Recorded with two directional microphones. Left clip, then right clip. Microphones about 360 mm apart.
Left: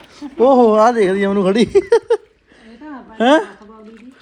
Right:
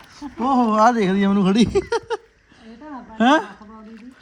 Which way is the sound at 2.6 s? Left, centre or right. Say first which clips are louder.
Left 2 dB; centre.